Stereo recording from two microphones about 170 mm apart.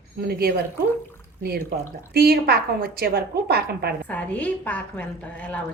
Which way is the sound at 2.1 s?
65° right (ahead or behind).